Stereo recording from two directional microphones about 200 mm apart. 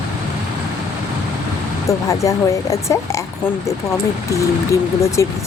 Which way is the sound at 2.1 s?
15° left (ahead or behind).